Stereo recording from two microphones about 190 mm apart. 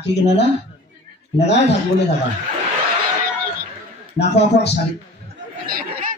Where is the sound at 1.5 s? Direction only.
65° left (ahead or behind).